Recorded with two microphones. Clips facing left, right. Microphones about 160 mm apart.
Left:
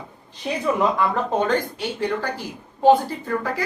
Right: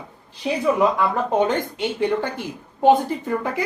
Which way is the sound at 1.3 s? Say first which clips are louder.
Right 1 dB; 20° right (ahead or behind).